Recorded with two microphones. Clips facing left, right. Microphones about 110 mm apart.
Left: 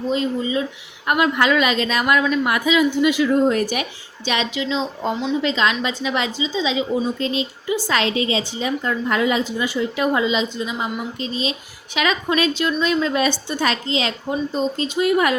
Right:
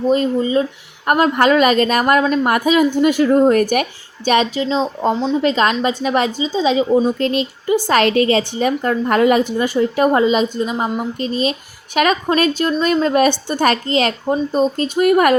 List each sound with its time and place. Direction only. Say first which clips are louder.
0.1 s a woman's voice: right 5 dB; 45° right (ahead or behind)
7.2 s a woman's voice: right 5 dB; 55° right (ahead or behind)